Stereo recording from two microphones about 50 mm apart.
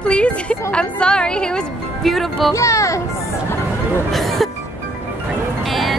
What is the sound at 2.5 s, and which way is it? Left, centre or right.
Speech, left.